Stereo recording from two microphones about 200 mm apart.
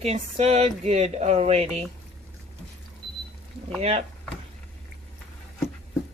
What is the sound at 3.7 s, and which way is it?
Speech, 30° right (ahead or behind).